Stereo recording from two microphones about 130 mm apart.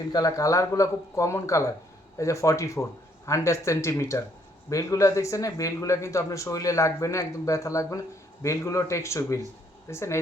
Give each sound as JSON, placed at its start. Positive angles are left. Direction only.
{"t": 0.1, "sound": "speech", "side_deg": 25}